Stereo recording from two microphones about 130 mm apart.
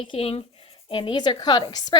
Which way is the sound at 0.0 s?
45° left (ahead or behind).